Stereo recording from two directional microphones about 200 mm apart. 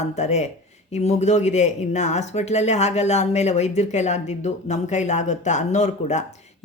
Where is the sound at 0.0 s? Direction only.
35° left (ahead or behind).